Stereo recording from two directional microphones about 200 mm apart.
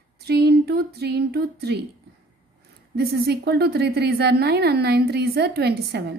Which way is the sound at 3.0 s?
50° right (ahead or behind).